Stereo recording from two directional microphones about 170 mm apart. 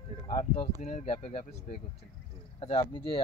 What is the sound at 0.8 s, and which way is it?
Speech, 40° left (ahead or behind).